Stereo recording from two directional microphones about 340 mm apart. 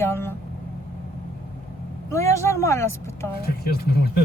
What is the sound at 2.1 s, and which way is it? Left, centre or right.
A woman's voice, centre.